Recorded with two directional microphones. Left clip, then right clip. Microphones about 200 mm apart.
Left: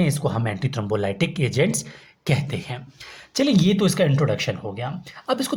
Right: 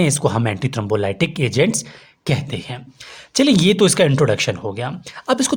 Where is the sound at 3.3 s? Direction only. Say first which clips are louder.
Right 6 dB; 30° right (ahead or behind).